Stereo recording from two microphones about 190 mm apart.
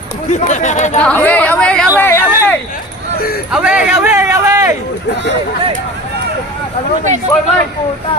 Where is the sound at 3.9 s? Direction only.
10° right (ahead or behind).